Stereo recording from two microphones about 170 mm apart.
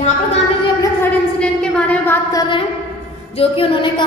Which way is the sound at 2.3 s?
30° left (ahead or behind).